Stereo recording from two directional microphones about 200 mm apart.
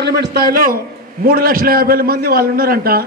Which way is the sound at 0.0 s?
50° right (ahead or behind).